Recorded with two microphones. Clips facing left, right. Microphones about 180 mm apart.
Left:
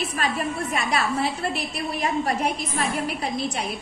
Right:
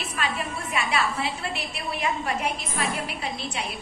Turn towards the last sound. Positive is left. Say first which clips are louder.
# left 3 dB
turn(degrees=40)  # may be behind; listen again after turning